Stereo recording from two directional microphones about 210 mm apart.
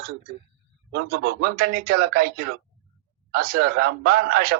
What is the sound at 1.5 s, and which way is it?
A man's voice, 45° right (ahead or behind).